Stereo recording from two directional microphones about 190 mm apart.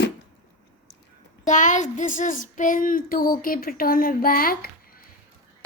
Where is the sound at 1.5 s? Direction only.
40° left (ahead or behind).